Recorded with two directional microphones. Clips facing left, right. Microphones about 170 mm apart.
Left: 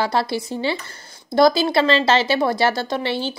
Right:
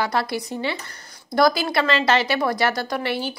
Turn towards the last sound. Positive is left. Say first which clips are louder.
# left 2 dB
turn(degrees=25)  # may be behind; listen again after turning